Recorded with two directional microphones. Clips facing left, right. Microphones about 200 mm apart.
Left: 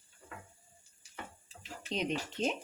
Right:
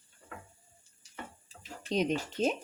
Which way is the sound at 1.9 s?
45° right (ahead or behind).